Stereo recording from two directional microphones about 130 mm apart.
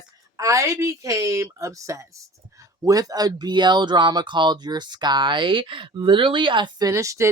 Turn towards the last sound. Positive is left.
turn(degrees=-25)  # may be behind; listen again after turning